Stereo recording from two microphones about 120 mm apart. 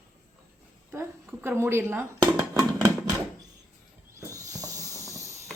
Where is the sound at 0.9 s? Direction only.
20° right (ahead or behind).